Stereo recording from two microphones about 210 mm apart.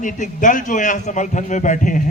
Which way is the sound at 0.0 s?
40° left (ahead or behind).